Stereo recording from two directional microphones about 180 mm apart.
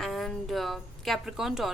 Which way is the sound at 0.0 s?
Centre (ahead or behind).